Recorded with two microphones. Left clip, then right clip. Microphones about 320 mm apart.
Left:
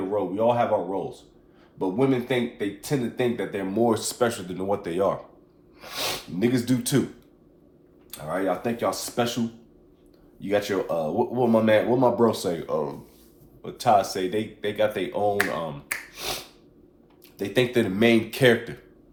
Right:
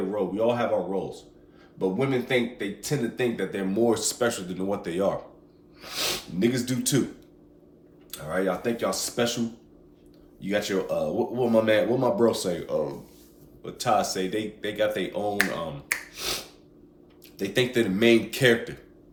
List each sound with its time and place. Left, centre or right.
0.1 s speech: centre
8.1 s speech: centre
10.4 s speech: centre